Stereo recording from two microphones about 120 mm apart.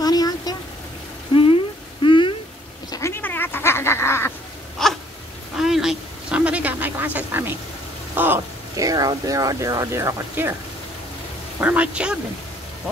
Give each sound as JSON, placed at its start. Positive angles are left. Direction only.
{"t": 0.0, "sound": "vehicle", "side_deg": 35}
{"t": 1.3, "sound": "a sound", "side_deg": 50}
{"t": 2.9, "sound": "cat", "side_deg": 20}
{"t": 4.8, "sound": "a sound", "side_deg": 5}
{"t": 8.7, "sound": "speech", "side_deg": -30}
{"t": 11.6, "sound": "speech", "side_deg": -10}